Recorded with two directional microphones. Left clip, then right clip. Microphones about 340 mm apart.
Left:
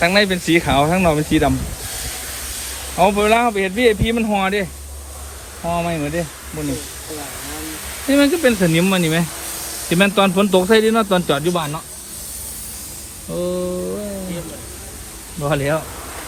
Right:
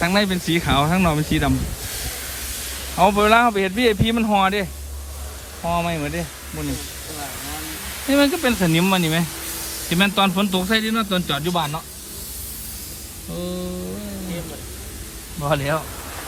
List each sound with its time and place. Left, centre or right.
0.0 s speech: centre
3.0 s speech: centre
3.6 s speech: right
4.1 s speech: centre
5.6 s speech: centre
8.1 s speech: centre
11.5 s speech: centre
13.3 s speech: centre
15.4 s speech: centre